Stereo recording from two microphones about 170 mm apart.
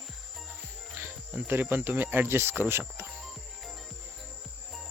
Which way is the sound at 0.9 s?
15° right (ahead or behind).